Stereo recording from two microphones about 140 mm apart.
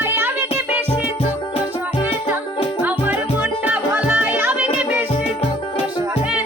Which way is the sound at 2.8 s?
10° right (ahead or behind).